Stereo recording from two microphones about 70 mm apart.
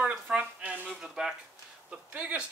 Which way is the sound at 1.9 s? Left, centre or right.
Centre.